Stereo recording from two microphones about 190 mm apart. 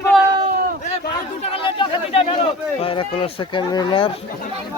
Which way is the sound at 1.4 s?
30° left (ahead or behind).